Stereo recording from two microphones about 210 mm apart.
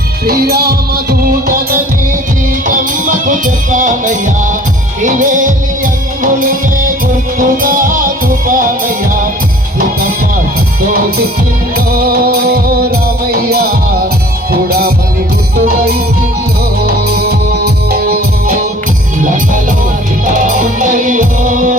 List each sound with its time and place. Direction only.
0.3 s music: 45° right (ahead or behind)
7.3 s music: 40° right (ahead or behind)
11.9 s music: 45° right (ahead or behind)
17.9 s music: 45° right (ahead or behind)
20.2 s music: 40° right (ahead or behind)